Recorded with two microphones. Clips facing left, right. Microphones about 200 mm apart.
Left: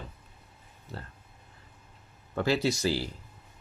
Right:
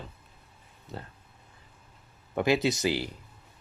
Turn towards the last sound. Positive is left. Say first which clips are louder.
# right 1 dB
turn(degrees=-20)  # may be behind; listen again after turning